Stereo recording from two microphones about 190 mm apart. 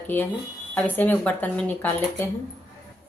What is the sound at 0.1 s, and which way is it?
Speech, 10° left (ahead or behind).